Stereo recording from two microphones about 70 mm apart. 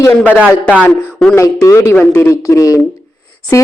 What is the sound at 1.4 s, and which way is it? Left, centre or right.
A man's voice, left.